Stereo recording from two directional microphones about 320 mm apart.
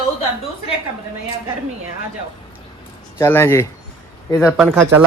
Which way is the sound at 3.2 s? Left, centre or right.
Centre.